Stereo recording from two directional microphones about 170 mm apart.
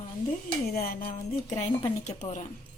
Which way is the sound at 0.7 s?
60° left (ahead or behind).